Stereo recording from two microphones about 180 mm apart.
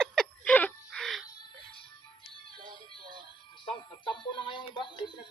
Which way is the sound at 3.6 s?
25° left (ahead or behind).